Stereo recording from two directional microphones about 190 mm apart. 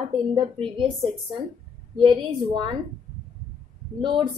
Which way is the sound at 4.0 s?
25° right (ahead or behind).